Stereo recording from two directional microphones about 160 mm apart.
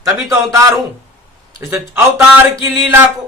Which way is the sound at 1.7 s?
15° right (ahead or behind).